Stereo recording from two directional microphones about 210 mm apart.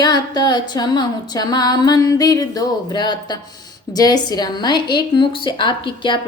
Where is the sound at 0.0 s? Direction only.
20° left (ahead or behind).